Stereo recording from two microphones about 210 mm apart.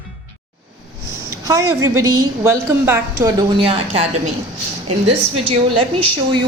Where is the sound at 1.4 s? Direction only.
15° right (ahead or behind).